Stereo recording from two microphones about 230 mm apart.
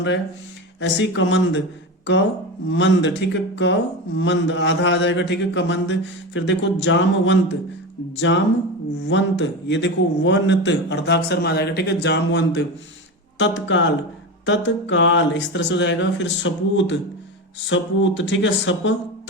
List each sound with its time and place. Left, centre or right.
0.8 s a man's voice: left
2.6 s a man's voice: left